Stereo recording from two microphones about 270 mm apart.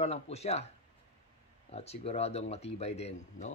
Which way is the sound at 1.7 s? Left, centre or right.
Left.